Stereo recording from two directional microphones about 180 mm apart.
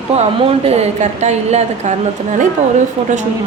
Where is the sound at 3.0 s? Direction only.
35° right (ahead or behind).